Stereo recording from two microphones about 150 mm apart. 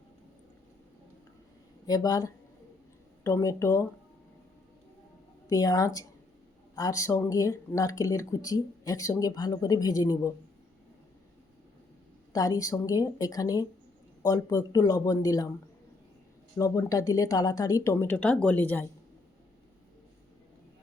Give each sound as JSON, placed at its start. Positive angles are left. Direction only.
{"t": 1.9, "sound": "speech", "side_deg": 25}
{"t": 5.5, "sound": "speech", "side_deg": 25}
{"t": 12.3, "sound": "speech", "side_deg": 25}
{"t": 16.6, "sound": "speech", "side_deg": 20}